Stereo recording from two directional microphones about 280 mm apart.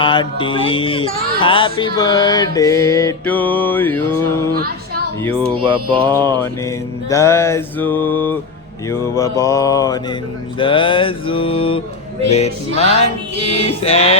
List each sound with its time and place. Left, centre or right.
0.0 s music: centre
5.5 s mantra: centre
7.1 s music: centre